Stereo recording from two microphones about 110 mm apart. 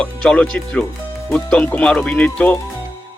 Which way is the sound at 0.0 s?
10° left (ahead or behind).